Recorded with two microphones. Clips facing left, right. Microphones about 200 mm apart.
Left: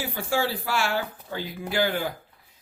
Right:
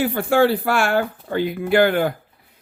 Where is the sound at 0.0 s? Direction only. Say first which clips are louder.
Right 10 dB; 60° right (ahead or behind).